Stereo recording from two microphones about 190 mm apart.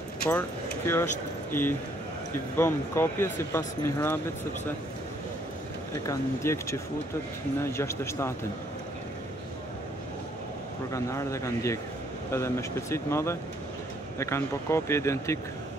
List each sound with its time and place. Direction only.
0.2 s speech: 10° left (ahead or behind)
6.0 s speech: 15° left (ahead or behind)
10.9 s speech: 15° left (ahead or behind)